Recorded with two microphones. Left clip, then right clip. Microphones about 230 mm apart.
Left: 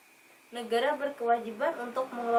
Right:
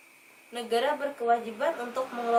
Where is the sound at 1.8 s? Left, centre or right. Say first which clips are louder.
Right 1 dB; left.